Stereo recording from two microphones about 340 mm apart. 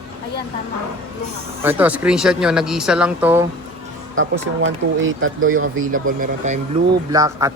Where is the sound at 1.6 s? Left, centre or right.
Centre.